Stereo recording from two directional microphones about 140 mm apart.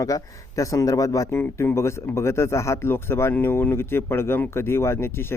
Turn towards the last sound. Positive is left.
turn(degrees=15)  # may be behind; listen again after turning